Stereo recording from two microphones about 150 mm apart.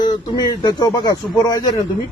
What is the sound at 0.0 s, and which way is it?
A man's voice, 25° left (ahead or behind).